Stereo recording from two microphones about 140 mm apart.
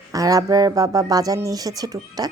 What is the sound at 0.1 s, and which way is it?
Speech, 25° right (ahead or behind).